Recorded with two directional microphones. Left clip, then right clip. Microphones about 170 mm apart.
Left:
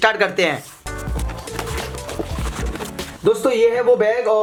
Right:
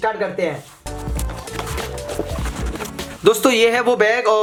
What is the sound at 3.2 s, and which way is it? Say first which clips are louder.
Speech: right 2 dB; 30° right (ahead or behind).